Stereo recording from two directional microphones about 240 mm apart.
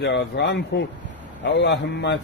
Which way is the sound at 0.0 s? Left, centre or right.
Left.